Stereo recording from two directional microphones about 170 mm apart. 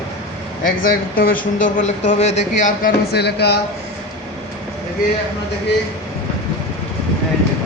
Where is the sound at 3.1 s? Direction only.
75° left (ahead or behind).